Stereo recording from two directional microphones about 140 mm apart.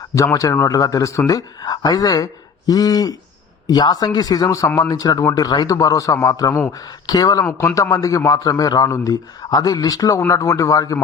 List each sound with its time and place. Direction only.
0.1 s speech: 20° left (ahead or behind)